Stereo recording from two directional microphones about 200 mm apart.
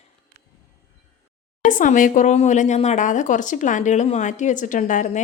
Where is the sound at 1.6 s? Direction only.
40° left (ahead or behind).